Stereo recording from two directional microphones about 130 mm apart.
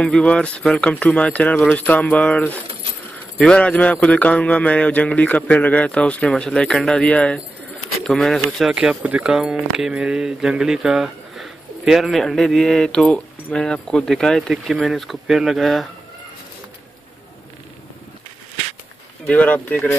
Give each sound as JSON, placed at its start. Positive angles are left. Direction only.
{"t": 0.0, "sound": "mantra", "side_deg": 5}
{"t": 8.0, "sound": "speech", "side_deg": 5}
{"t": 19.2, "sound": "mantra", "side_deg": 10}